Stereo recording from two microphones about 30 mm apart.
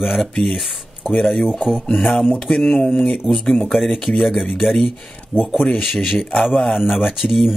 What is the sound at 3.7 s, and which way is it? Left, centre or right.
Speech, centre.